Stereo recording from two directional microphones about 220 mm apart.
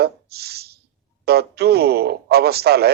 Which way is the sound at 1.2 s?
45° right (ahead or behind).